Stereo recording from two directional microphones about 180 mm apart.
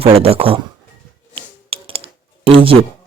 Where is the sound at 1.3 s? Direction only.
30° right (ahead or behind).